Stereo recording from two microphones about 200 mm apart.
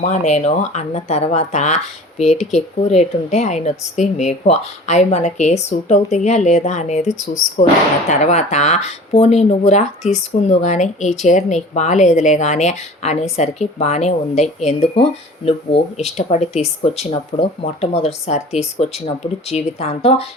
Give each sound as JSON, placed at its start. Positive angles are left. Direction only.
{"t": 0.0, "sound": "speech", "side_deg": 35}
{"t": 8.1, "sound": "speech", "side_deg": 35}